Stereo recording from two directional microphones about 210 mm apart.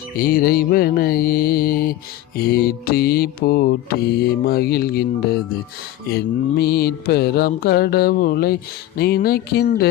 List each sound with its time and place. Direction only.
0.1 s music: 45° left (ahead or behind)